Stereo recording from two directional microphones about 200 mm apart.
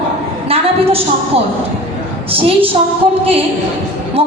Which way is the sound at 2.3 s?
30° right (ahead or behind).